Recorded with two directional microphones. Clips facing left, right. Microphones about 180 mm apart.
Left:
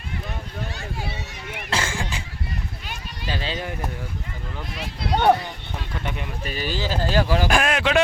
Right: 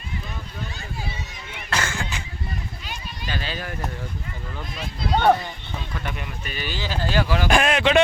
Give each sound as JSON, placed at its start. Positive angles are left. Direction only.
{"t": 0.8, "sound": "a sound", "side_deg": 60}
{"t": 1.7, "sound": "a sound", "side_deg": 30}
{"t": 3.2, "sound": "speech", "side_deg": 25}
{"t": 4.7, "sound": "speech", "side_deg": 65}
{"t": 6.4, "sound": "speech", "side_deg": 35}
{"t": 7.4, "sound": "a man's voice", "side_deg": 0}